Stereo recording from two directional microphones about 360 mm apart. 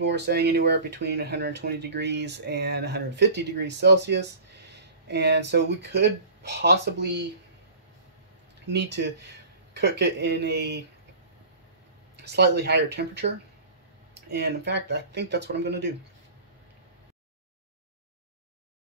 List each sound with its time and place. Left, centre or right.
0.0 s speech: right
8.6 s speech: right
12.2 s speech: right
14.3 s speech: right